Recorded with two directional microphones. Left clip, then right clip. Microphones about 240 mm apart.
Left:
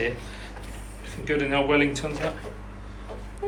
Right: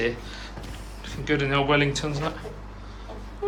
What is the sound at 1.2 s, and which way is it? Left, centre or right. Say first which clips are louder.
Speech: even; centre.